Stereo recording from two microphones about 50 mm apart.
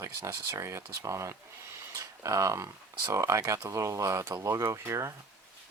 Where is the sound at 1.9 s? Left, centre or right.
Right.